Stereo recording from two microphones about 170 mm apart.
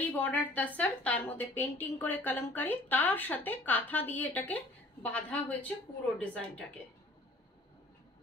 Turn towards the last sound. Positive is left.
turn(degrees=10)  # may be behind; listen again after turning